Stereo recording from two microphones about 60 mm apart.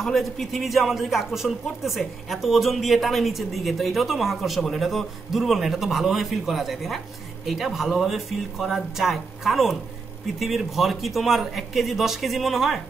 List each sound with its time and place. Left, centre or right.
0.0 s speech: centre